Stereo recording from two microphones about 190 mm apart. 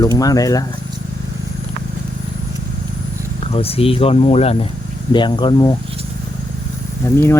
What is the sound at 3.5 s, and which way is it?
Speech, 30° left (ahead or behind).